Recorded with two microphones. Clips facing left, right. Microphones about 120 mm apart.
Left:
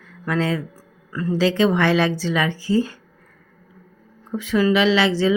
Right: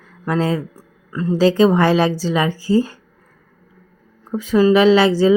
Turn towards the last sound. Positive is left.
turn(degrees=-40)  # may be behind; listen again after turning